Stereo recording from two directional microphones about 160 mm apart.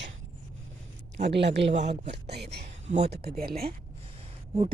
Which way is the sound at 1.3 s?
90° right.